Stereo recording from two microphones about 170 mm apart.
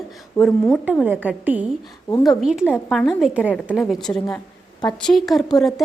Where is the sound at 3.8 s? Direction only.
5° left (ahead or behind).